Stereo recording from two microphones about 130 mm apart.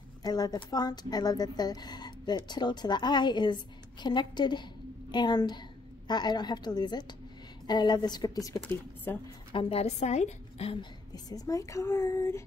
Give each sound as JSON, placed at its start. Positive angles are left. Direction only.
{"t": 0.2, "sound": "a woman's voice", "side_deg": 30}
{"t": 8.6, "sound": "speech", "side_deg": 15}
{"t": 9.5, "sound": "a woman's voice", "side_deg": 45}
{"t": 10.8, "sound": "speech", "side_deg": 30}